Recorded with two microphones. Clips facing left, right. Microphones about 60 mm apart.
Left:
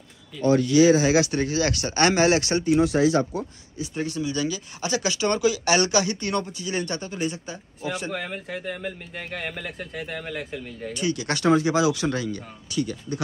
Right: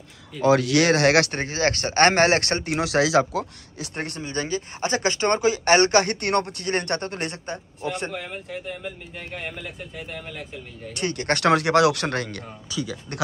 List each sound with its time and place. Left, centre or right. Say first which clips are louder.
0.5 s speech: left 1 dB; right
1.3 s speech: even; right
11.0 s speech: right 2 dB; right